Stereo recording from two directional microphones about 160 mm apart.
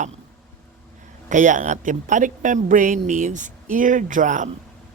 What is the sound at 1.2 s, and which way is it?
A woman's voice, 50° right (ahead or behind).